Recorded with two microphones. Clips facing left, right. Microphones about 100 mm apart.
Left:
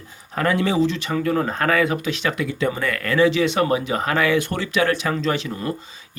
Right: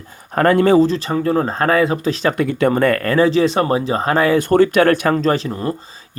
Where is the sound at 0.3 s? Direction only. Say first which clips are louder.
Right 8 dB; 50° right (ahead or behind).